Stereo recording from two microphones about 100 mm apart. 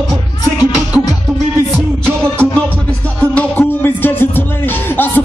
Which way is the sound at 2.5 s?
15° left (ahead or behind).